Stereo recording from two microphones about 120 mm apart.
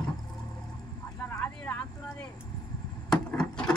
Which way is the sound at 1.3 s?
15° left (ahead or behind).